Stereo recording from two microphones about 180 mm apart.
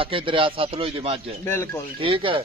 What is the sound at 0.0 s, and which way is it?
Speech, 30° right (ahead or behind).